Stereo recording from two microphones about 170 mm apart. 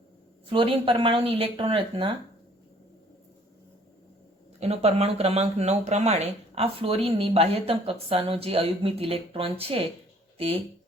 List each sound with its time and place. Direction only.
0.5 s speech: 30° right (ahead or behind)
4.6 s speech: 35° right (ahead or behind)